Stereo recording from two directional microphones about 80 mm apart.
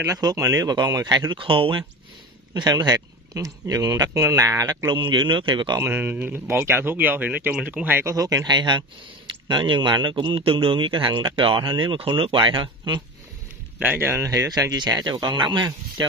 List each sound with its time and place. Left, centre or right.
0.1 s a man's voice: right
1.3 s a man's voice: right
2.5 s a man's voice: right
4.9 s a man's voice: right
5.8 s speech: right
8.0 s a man's voice: right
13.7 s speech: right
14.7 s speech: right